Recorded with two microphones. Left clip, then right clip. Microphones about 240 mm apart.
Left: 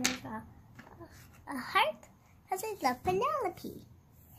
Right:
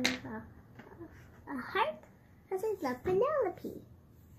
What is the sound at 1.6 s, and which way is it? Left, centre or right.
A child's voice, left.